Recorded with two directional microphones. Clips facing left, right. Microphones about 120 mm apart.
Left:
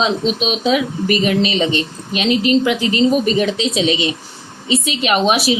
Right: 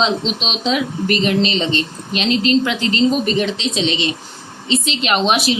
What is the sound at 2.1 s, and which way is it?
A woman's voice, 10° left (ahead or behind).